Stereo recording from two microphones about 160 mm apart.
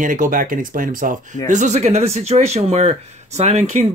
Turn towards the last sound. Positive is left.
turn(degrees=-50)  # may be behind; listen again after turning